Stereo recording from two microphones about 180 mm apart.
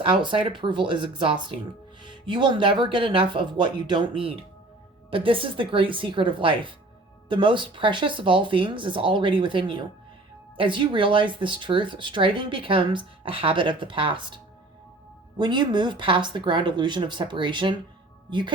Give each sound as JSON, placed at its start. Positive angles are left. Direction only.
{"t": 0.0, "sound": "speech", "side_deg": -25}
{"t": 15.4, "sound": "speech", "side_deg": -25}